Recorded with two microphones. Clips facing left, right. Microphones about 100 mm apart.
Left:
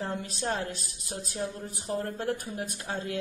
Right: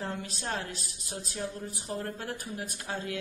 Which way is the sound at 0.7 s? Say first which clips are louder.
Left 3 dB; 45° left (ahead or behind).